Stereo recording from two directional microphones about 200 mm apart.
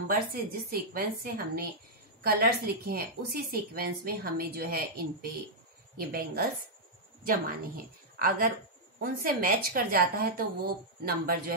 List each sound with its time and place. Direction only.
0.1 s a woman's voice: 50° right (ahead or behind)